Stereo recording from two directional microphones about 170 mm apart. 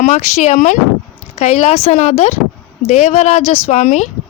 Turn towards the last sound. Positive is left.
turn(degrees=45)  # may be behind; listen again after turning